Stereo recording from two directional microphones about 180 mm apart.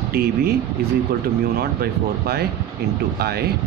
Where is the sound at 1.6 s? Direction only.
60° right (ahead or behind).